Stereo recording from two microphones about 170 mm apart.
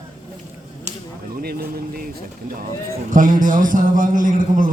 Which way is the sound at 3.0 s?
55° right (ahead or behind).